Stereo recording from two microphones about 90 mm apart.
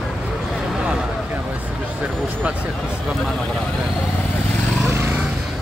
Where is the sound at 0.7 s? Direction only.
10° right (ahead or behind).